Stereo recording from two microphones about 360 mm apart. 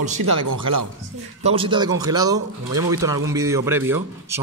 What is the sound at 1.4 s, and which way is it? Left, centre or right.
Speech, centre.